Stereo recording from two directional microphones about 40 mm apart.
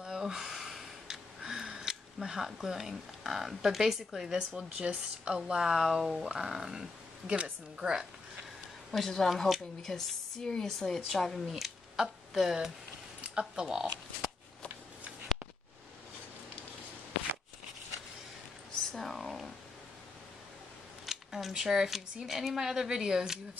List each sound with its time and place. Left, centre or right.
0.0 s a sound: centre
4.6 s speech: right
5.6 s speech: centre
7.2 s a woman's voice: right
7.8 s speech: centre
8.9 s speech: centre
11.5 s speech: centre
13.3 s speech: right
18.9 s a sound: centre
21.0 s speech: centre